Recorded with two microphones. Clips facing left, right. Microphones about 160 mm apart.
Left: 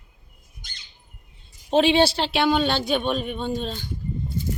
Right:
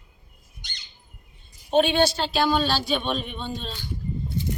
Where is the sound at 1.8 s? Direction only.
90° left.